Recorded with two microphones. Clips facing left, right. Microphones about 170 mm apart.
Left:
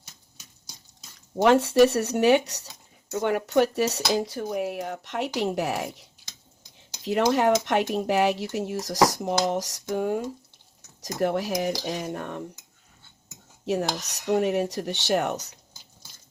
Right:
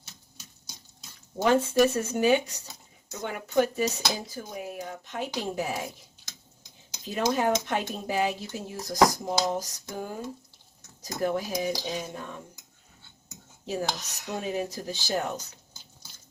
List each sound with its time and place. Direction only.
1.4 s speech: 75° left (ahead or behind)
7.0 s speech: 75° left (ahead or behind)
14.3 s speech: 70° left (ahead or behind)